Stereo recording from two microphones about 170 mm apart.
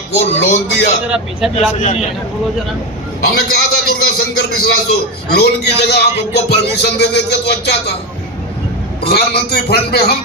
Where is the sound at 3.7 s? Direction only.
65° left (ahead or behind).